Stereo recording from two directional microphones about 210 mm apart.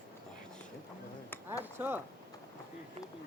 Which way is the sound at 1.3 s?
10° left (ahead or behind).